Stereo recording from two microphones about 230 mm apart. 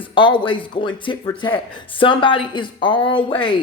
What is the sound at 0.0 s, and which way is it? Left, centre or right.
Speech, left.